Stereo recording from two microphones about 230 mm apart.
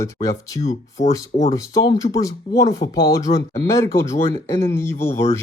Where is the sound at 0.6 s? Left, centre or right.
Left.